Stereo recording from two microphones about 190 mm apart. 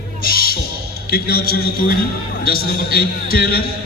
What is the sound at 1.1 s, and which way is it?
A man's voice, 55° left (ahead or behind).